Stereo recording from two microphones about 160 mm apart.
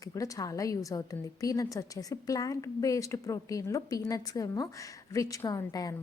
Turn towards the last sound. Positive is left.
turn(degrees=25)  # may be behind; listen again after turning